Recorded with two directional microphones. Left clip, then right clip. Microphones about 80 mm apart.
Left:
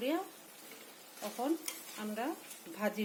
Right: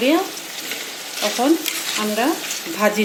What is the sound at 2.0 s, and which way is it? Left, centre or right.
Stir, centre.